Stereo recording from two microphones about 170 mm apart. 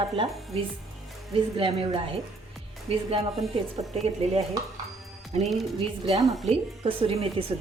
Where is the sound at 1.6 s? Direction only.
30° right (ahead or behind).